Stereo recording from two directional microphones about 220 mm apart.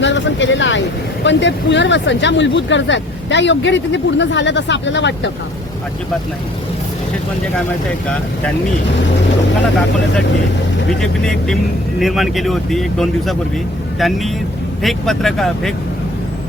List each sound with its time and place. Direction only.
0.0 s vehicle: 55° left (ahead or behind)
1.2 s speech: 55° left (ahead or behind)
11.0 s speech: 5° left (ahead or behind)